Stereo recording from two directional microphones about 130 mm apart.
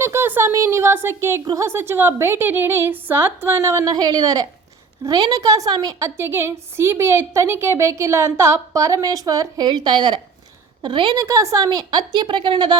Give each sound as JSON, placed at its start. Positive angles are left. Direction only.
{"t": 0.0, "sound": "a woman's voice", "side_deg": -20}
{"t": 6.1, "sound": "a woman's voice", "side_deg": -20}
{"t": 11.2, "sound": "a woman's voice", "side_deg": -25}